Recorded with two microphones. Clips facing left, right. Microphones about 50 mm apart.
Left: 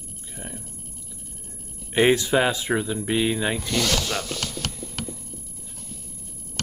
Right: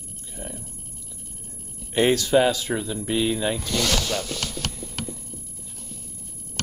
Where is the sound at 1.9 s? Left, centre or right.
Centre.